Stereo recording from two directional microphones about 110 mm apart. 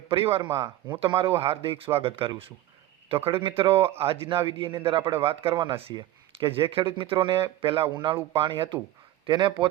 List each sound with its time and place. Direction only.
0.1 s a man's voice: 60° right (ahead or behind)
0.9 s speech: 45° right (ahead or behind)
1.4 s a man's voice: 60° right (ahead or behind)
5.9 s a sound: 40° right (ahead or behind)
6.5 s speech: 55° right (ahead or behind)